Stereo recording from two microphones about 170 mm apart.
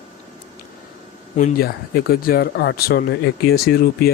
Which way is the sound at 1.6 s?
60° left (ahead or behind).